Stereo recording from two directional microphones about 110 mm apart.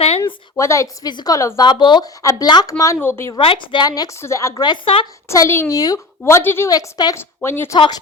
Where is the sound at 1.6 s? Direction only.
45° left (ahead or behind).